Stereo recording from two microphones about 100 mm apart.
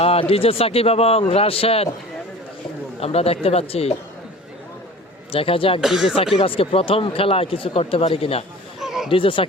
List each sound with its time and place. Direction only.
0.0 s speech: 80° left
1.3 s speech: 75° left (ahead or behind)
3.0 s speech: 90° left
5.3 s speech: 65° left (ahead or behind)
5.8 s speech: 5° right (ahead or behind)
6.4 s speech: 65° left (ahead or behind)
8.8 s chatter: 5° right (ahead or behind)
9.0 s speech: 60° left (ahead or behind)